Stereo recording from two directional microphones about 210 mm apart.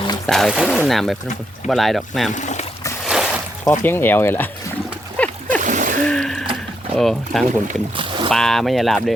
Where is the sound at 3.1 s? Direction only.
5° right (ahead or behind).